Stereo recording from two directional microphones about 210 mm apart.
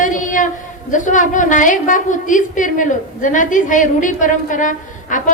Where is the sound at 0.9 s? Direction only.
35° left (ahead or behind).